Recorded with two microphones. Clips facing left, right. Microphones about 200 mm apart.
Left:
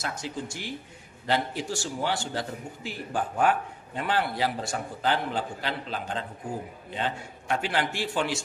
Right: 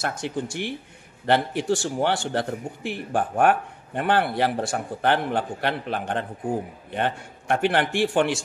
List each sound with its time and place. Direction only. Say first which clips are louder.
0.0 s a man's voice: right 6 dB; 60° right (ahead or behind)